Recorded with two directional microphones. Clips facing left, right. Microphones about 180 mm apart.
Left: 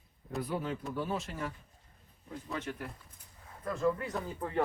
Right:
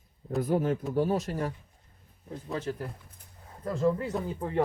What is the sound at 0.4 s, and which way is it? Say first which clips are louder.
Speech: right 9 dB; 45° right (ahead or behind).